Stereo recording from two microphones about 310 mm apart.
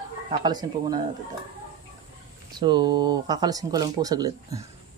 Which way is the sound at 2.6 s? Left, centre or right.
Centre.